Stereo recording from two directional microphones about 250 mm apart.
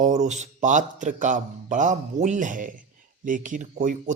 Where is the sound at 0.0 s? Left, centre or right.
Right.